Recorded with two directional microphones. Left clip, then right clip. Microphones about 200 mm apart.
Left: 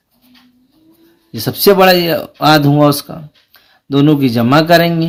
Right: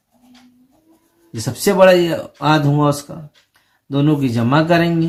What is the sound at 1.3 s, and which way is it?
Speech, 40° left (ahead or behind).